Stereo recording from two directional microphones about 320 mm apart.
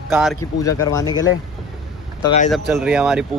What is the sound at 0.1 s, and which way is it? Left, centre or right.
Speech, centre.